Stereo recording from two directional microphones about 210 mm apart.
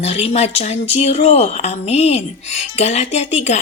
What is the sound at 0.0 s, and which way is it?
Speech, 30° left (ahead or behind).